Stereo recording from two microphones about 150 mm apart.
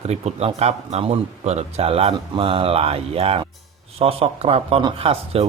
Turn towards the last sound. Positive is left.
turn(degrees=-40)  # may be behind; listen again after turning